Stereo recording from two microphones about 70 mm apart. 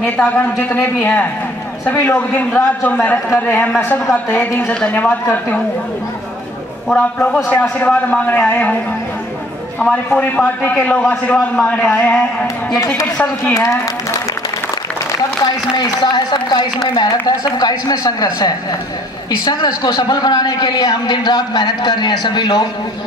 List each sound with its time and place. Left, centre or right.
0.2 s a man's voice: left
6.9 s a man's voice: centre
9.8 s a man's voice: centre
12.7 s a woman's voice: left
15.1 s a man's voice: left
17.4 s speech: left
19.4 s a man's voice: left